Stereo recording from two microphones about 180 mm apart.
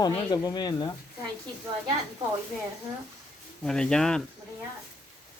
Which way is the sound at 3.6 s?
5° left (ahead or behind).